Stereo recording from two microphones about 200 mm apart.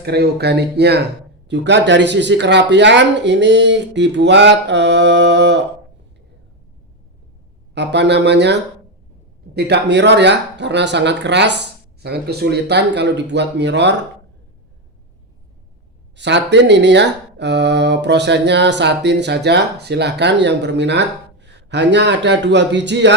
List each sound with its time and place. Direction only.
0.0 s speech: 55° right (ahead or behind)
7.8 s speech: 60° right (ahead or behind)
9.6 s speech: 55° right (ahead or behind)
16.1 s speech: 60° right (ahead or behind)